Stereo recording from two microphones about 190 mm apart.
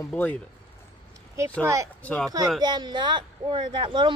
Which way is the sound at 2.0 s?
5° left (ahead or behind).